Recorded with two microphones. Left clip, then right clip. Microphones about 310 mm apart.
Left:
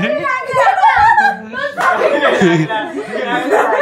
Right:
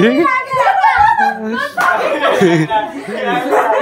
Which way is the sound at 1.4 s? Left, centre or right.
Centre.